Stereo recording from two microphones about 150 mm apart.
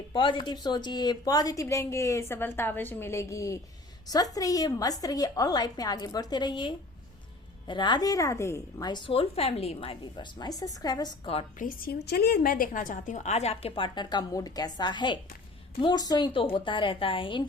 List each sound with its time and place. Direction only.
0.1 s a woman's voice: 35° left (ahead or behind)
11.6 s a woman's voice: 85° left; by 17.4 s 35° left (ahead or behind)